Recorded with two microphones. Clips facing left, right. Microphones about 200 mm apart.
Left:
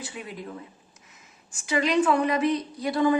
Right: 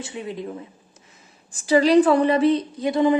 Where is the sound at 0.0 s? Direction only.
25° right (ahead or behind).